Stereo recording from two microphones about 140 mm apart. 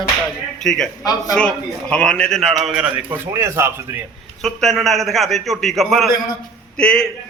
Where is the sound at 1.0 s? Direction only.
25° left (ahead or behind).